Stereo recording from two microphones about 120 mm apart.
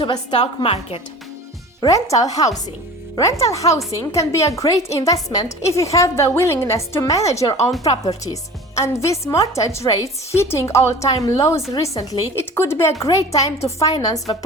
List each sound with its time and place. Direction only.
0.0 s a woman's voice: 45° left (ahead or behind)
1.8 s a woman's voice: 30° left (ahead or behind)